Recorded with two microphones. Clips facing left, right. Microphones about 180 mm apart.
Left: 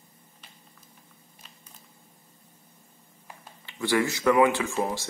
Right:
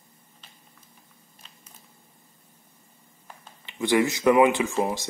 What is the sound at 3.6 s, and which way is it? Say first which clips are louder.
Speech: right 3 dB; 20° right (ahead or behind).